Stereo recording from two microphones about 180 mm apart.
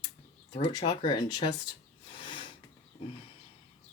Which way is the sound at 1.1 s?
25° left (ahead or behind).